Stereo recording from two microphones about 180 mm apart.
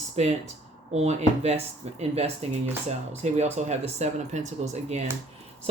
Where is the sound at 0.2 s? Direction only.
35° right (ahead or behind).